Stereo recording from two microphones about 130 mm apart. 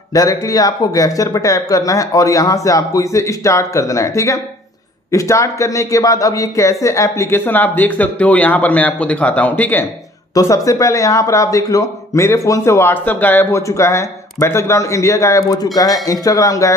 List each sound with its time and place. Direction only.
0.1 s a man's voice: 25° left (ahead or behind)
10.3 s speech: 25° left (ahead or behind)